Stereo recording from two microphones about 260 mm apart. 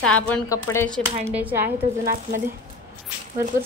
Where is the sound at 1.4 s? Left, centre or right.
Centre.